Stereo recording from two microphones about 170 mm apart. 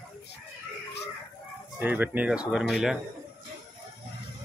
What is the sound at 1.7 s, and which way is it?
Speech, 10° right (ahead or behind).